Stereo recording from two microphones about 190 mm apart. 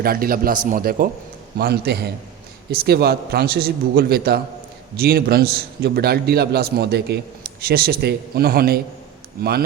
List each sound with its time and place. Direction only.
0.0 s a man's voice: 50° right (ahead or behind)